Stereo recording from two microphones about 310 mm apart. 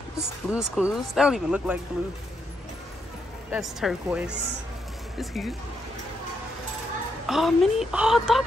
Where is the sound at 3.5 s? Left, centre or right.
Centre.